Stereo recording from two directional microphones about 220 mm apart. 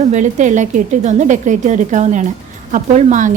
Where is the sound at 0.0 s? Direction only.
35° right (ahead or behind).